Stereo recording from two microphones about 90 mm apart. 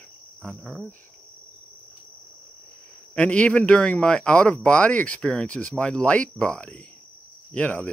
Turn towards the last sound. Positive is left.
turn(degrees=15)  # may be behind; listen again after turning